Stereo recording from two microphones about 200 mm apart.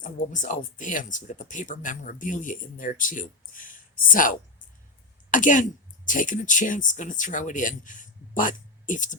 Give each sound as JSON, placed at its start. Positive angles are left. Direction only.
{"t": 0.0, "sound": "speech", "side_deg": 40}